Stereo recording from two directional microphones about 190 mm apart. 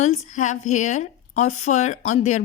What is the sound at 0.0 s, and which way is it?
Speech, 35° left (ahead or behind).